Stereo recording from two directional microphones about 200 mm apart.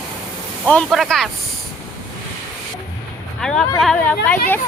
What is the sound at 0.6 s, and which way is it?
Speech, 5° left (ahead or behind).